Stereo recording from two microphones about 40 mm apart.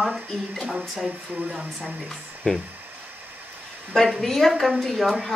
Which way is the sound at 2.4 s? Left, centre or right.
Left.